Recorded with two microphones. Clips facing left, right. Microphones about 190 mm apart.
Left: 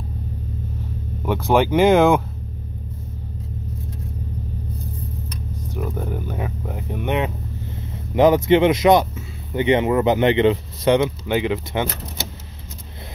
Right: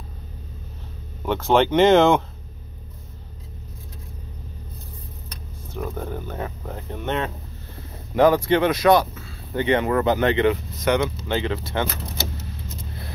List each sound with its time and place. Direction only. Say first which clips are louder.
1.2 s speech: left 1 dB; 10° left (ahead or behind)
5.7 s speech: left 2 dB; 5° left (ahead or behind); by 11.0 s 25° left (ahead or behind)
11.0 s speech: left 4 dB; 15° left (ahead or behind)